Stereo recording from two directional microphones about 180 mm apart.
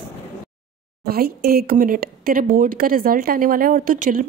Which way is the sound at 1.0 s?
60° right (ahead or behind).